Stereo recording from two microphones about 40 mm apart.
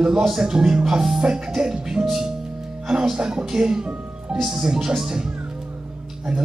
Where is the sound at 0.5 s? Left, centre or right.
Centre.